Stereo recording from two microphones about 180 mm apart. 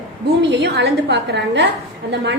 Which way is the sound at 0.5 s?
70° right (ahead or behind).